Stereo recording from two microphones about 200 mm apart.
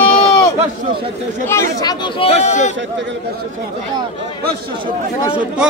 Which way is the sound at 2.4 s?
35° left (ahead or behind).